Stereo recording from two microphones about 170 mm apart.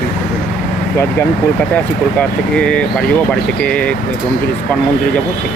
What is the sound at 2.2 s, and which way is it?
Speech, 5° left (ahead or behind).